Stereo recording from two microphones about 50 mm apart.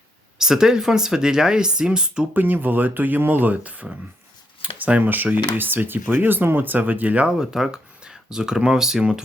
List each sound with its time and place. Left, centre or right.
0.3 s speech: centre
2.3 s speech: right
7.3 s speech: centre